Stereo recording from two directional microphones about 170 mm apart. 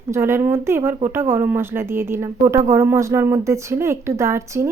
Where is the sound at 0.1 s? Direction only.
15° right (ahead or behind).